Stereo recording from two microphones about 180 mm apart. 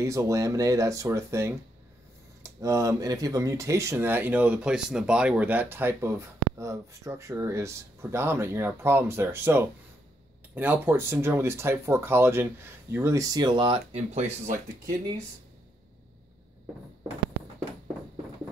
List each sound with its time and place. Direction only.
0.0 s speech: 15° right (ahead or behind); by 14.6 s 40° right (ahead or behind)